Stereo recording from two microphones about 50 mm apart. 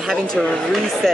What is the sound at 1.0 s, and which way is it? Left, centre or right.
Speech, centre.